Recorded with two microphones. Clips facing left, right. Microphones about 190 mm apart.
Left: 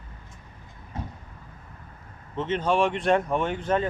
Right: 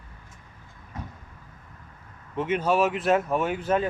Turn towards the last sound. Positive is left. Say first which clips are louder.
# right 1 dB
turn(degrees=-10)  # may be behind; listen again after turning